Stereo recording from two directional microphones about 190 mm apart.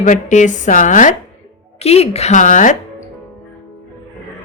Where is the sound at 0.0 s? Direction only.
40° left (ahead or behind).